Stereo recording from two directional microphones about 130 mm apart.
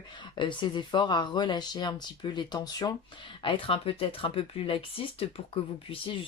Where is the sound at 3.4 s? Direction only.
45° left (ahead or behind).